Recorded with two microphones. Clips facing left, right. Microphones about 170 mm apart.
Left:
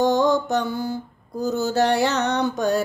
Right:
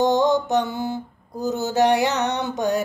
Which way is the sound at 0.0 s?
20° right (ahead or behind).